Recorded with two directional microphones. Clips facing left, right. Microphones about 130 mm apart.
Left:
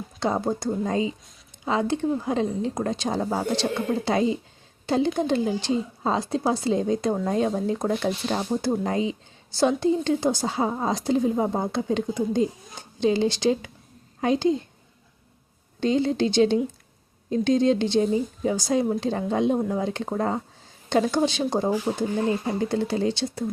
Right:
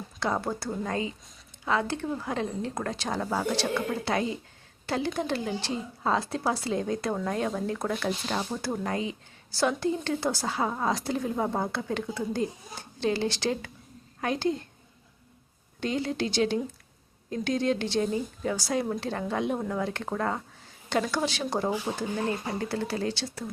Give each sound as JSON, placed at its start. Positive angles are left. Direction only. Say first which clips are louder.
{"t": 0.2, "sound": "speech", "louder": "left 5 dB", "side_deg": 20}
{"t": 15.8, "sound": "speech", "louder": "left 7 dB", "side_deg": 25}